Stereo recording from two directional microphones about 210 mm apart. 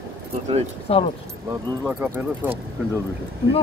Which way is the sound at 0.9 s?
30° left (ahead or behind).